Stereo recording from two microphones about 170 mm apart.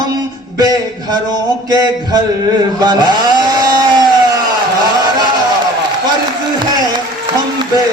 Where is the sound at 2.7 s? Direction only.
25° right (ahead or behind).